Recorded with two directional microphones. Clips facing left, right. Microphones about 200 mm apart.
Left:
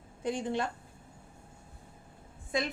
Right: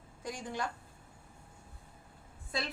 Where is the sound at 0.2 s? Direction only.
25° left (ahead or behind).